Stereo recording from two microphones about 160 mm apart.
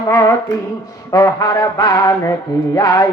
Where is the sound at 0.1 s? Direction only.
20° left (ahead or behind).